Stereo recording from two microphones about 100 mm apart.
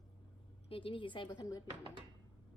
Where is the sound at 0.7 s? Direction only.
60° left (ahead or behind); by 1.6 s 40° left (ahead or behind).